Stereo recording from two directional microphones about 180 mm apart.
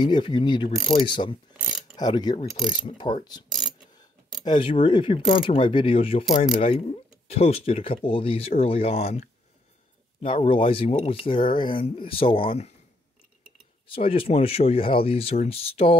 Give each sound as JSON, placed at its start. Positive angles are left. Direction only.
{"t": 0.0, "sound": "speech", "side_deg": 25}
{"t": 4.5, "sound": "speech", "side_deg": 30}
{"t": 10.2, "sound": "speech", "side_deg": 30}
{"t": 13.8, "sound": "speech", "side_deg": 30}